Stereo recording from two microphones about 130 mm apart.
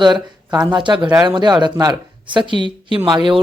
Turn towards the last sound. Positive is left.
turn(degrees=-35)  # may be behind; listen again after turning